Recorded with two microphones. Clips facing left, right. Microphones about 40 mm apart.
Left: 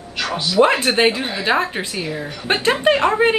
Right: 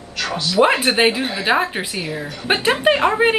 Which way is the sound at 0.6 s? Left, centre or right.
Centre.